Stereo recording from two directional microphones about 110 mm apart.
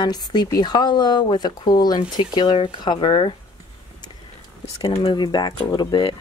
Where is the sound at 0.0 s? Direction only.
40° left (ahead or behind).